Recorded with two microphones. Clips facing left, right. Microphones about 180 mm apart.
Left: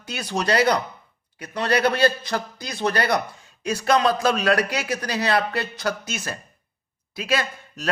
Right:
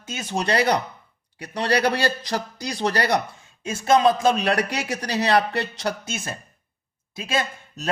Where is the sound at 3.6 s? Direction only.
25° right (ahead or behind).